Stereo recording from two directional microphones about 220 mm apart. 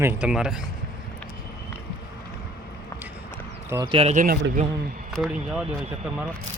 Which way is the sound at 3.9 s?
30° right (ahead or behind).